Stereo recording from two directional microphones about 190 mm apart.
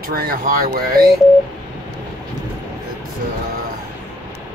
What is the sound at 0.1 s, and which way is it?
Speech, 50° right (ahead or behind).